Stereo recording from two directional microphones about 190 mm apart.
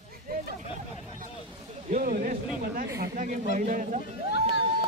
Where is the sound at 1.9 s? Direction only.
45° right (ahead or behind).